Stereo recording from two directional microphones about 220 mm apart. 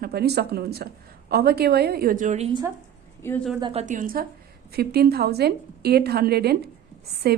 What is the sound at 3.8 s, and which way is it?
A woman's voice, 35° right (ahead or behind).